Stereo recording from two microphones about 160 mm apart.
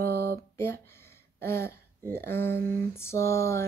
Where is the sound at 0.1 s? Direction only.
80° right.